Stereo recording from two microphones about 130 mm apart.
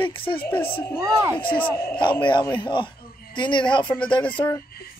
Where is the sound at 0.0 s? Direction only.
40° left (ahead or behind).